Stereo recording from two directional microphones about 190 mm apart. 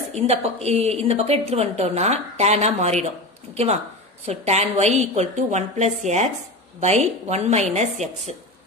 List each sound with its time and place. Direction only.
0.1 s a woman's voice: 35° right (ahead or behind)
4.3 s a woman's voice: 35° right (ahead or behind)